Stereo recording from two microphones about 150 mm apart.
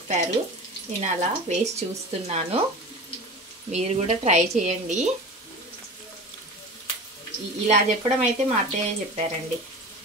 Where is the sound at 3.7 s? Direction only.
50° right (ahead or behind).